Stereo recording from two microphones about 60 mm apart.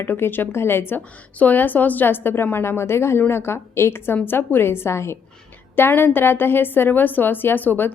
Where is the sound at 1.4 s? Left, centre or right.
Left.